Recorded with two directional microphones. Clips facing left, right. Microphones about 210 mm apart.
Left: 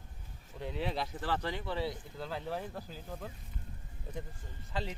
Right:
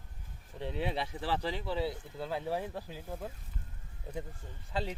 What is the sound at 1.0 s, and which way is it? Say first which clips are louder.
Speech: right 1 dB; 10° right (ahead or behind).